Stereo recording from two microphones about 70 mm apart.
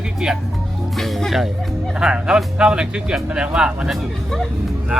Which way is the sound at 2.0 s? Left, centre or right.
Centre.